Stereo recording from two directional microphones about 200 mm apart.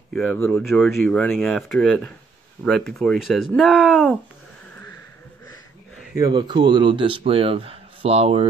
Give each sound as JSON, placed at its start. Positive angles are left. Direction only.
{"t": 0.1, "sound": "speech", "side_deg": 10}
{"t": 0.7, "sound": "speech", "side_deg": 0}
{"t": 6.3, "sound": "speech", "side_deg": -20}